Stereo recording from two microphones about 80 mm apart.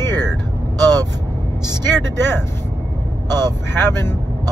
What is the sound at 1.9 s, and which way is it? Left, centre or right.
Speech, left.